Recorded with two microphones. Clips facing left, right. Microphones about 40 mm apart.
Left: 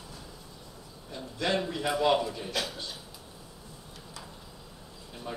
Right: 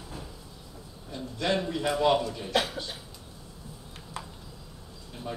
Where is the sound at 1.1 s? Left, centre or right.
Centre.